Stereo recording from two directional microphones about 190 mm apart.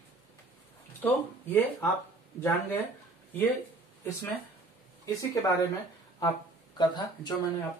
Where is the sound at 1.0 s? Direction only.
10° left (ahead or behind).